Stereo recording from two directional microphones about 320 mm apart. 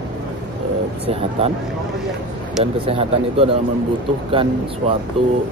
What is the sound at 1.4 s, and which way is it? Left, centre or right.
Speech, centre.